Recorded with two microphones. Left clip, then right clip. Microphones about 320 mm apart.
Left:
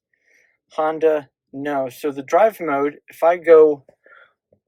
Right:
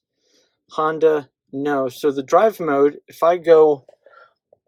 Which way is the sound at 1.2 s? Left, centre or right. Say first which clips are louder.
Right 5 dB; right.